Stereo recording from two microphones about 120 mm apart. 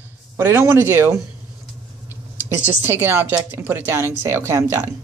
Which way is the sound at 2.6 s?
15° right (ahead or behind).